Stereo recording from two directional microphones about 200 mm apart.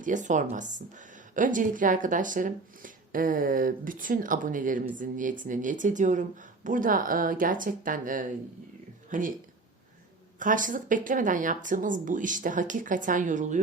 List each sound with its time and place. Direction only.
0.0 s speech: 40° right (ahead or behind)
10.4 s speech: 40° right (ahead or behind)